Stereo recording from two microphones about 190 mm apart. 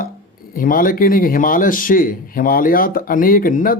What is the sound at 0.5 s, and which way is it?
Speech, 45° left (ahead or behind).